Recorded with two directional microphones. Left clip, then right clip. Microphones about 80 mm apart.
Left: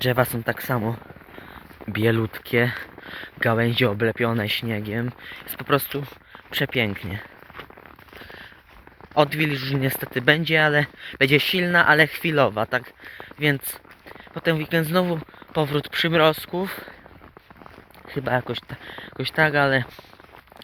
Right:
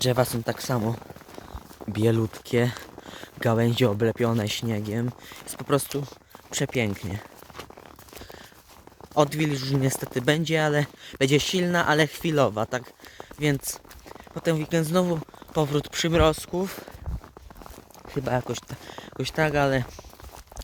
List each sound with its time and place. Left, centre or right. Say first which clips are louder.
0.0 s speech: left 2 dB; centre
0.9 s a sound: left 1 dB; right
1.9 s speech: left 2 dB; right
2.3 s speech: left 3 dB; right
3.0 s a sound: left 5 dB; right
3.4 s speech: left 2 dB; right
8.2 s a sound: left 5 dB; right
9.1 s speech: left 3 dB; right
11.4 s speech: left 6 dB; right
12.4 s speech: left 3 dB; right
13.4 s speech: left 4 dB; right
18.1 s speech: left 3 dB; right